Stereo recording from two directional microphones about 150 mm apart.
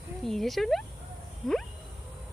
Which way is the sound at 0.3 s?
Centre (ahead or behind).